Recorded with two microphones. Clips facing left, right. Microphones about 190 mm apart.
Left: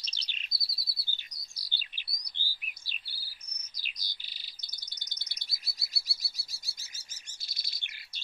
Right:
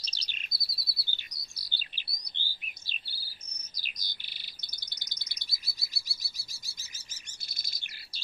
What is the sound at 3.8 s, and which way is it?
Bird, 50° right (ahead or behind).